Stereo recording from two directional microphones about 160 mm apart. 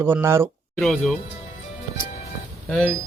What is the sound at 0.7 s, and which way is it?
Speech, 5° left (ahead or behind).